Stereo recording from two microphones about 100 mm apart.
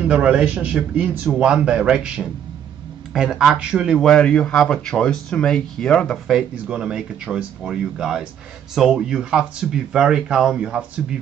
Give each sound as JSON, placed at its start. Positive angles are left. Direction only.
{"t": 0.1, "sound": "a man's voice", "side_deg": -10}
{"t": 4.0, "sound": "speech", "side_deg": 10}
{"t": 6.5, "sound": "a man's voice", "side_deg": -10}